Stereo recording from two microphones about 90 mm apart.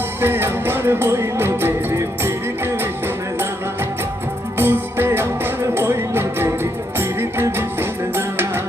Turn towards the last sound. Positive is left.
turn(degrees=-25)  # may be behind; listen again after turning